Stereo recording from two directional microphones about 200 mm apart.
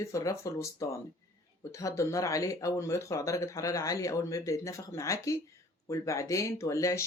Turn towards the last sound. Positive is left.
turn(degrees=15)  # may be behind; listen again after turning